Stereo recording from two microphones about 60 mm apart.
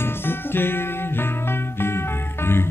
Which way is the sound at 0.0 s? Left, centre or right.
Left.